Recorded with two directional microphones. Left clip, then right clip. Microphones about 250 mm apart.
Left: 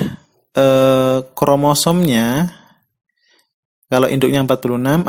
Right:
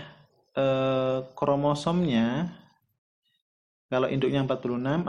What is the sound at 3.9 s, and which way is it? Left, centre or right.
Speech, left.